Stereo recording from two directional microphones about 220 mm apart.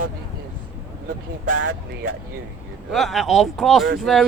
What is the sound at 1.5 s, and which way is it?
Speech, 90° right.